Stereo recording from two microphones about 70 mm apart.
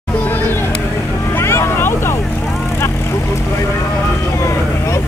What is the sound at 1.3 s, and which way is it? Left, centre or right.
Vehicle, left.